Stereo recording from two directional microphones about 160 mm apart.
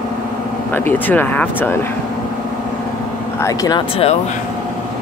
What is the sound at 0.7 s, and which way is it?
Speech, 10° left (ahead or behind).